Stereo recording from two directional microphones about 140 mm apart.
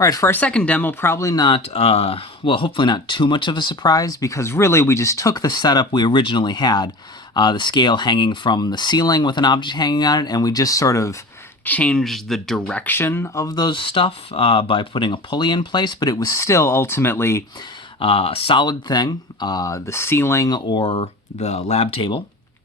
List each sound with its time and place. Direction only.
0.0 s speech: 20° left (ahead or behind)
11.6 s speech: 10° left (ahead or behind)
18.0 s speech: 40° left (ahead or behind)
21.3 s speech: 50° left (ahead or behind)